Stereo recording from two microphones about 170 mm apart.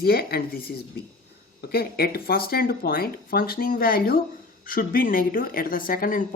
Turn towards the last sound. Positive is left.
turn(degrees=55)  # may be behind; listen again after turning